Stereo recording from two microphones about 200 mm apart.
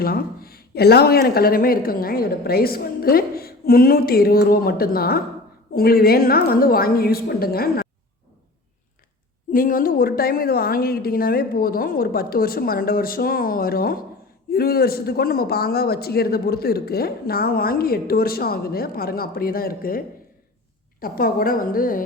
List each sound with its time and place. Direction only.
0.0 s a man's voice: 50° left (ahead or behind)
9.5 s a man's voice: 45° left (ahead or behind)